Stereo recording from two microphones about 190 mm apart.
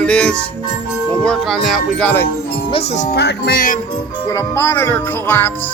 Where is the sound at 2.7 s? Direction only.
35° left (ahead or behind).